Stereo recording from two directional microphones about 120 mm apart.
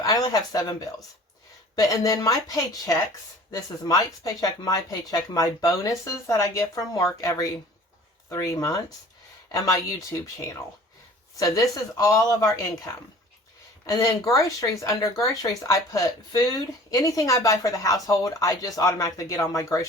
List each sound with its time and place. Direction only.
0.0 s speech: 30° left (ahead or behind)
1.7 s speech: 30° left (ahead or behind)
11.3 s speech: 30° left (ahead or behind)